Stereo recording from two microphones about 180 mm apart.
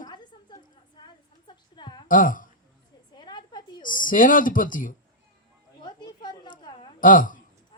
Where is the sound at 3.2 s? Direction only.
25° left (ahead or behind).